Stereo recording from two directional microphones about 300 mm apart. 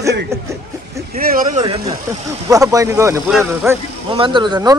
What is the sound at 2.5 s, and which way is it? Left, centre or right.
Speech, centre.